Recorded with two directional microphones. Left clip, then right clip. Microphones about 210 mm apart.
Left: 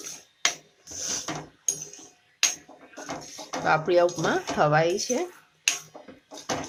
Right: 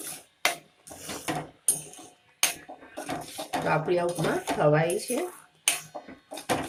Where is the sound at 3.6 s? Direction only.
45° left (ahead or behind).